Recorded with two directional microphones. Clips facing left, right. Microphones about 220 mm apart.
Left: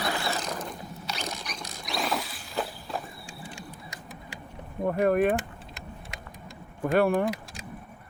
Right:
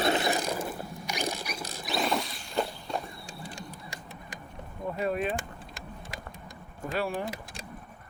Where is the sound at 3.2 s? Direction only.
35° right (ahead or behind).